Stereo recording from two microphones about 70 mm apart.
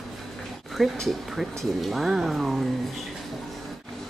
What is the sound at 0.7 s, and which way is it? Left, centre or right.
Speech, centre.